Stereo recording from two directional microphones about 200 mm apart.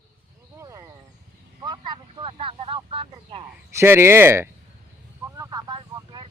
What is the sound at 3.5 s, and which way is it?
Speech, 10° right (ahead or behind).